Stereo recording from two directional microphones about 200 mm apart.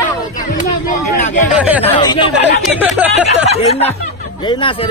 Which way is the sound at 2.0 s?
25° left (ahead or behind).